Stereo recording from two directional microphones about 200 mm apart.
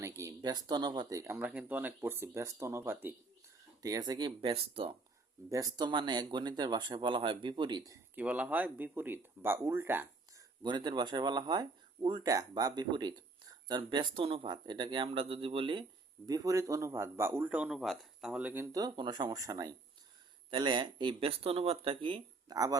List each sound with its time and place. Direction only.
0.0 s speech: 15° right (ahead or behind)
8.1 s speech: 5° right (ahead or behind)
10.6 s speech: 20° right (ahead or behind)